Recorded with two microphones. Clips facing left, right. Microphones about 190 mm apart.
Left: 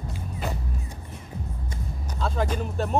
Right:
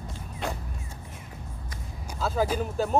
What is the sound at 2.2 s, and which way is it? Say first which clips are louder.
Music: right 1 dB; 5° right (ahead or behind).